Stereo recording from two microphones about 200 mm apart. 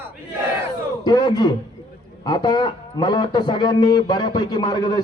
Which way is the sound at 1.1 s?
20° left (ahead or behind).